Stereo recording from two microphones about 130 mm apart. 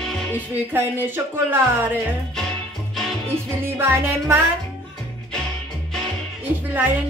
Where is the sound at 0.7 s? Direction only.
15° right (ahead or behind).